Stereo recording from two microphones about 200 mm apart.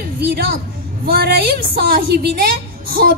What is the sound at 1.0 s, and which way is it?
A woman's voice, 50° right (ahead or behind).